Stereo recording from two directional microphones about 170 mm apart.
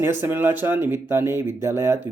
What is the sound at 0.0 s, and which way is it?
Speech, 10° right (ahead or behind).